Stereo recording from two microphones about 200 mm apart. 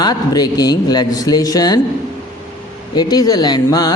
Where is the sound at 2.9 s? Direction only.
20° left (ahead or behind).